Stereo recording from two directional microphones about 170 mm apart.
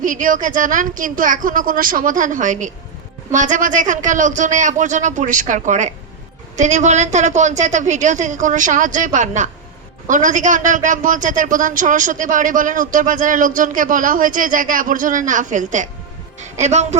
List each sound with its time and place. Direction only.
0.0 s a man's voice: 50° right (ahead or behind)